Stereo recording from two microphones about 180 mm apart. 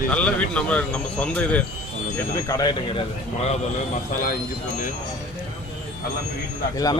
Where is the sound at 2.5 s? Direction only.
20° left (ahead or behind).